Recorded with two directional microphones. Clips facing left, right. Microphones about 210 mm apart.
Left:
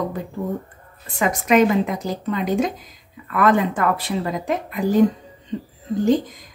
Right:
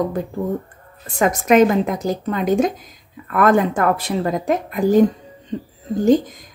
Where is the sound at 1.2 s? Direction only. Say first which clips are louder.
Right 3 dB; 45° right (ahead or behind).